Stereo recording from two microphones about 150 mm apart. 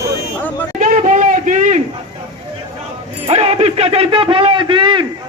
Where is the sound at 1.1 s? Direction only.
60° right (ahead or behind).